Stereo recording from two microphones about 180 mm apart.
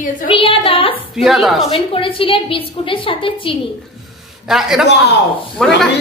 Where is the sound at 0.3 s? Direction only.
30° left (ahead or behind).